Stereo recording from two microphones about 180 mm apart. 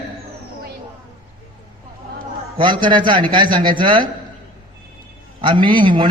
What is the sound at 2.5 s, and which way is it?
A man's voice, 25° right (ahead or behind).